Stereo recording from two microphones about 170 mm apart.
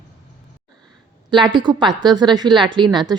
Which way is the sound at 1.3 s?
25° right (ahead or behind).